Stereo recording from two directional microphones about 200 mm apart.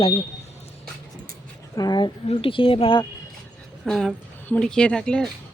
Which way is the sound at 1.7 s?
20° left (ahead or behind).